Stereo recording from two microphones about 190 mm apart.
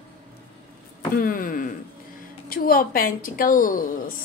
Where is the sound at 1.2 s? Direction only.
50° left (ahead or behind).